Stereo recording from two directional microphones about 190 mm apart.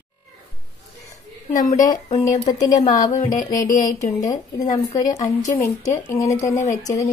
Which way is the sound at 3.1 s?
45° left (ahead or behind).